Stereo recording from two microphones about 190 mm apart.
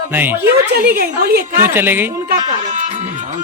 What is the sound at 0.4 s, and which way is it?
A woman's voice, 55° right (ahead or behind).